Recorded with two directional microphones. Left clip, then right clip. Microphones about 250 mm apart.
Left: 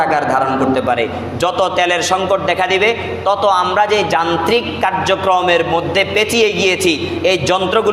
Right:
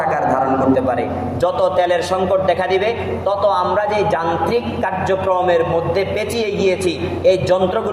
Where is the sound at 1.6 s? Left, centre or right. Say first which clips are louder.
Left 1 dB; left.